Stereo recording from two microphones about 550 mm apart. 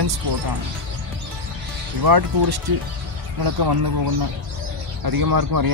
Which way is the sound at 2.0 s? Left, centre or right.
Right.